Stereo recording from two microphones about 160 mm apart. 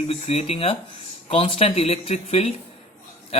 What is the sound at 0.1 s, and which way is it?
Speech, 40° left (ahead or behind).